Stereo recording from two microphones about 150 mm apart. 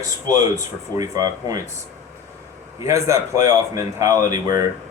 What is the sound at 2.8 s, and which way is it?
Speech, 20° right (ahead or behind).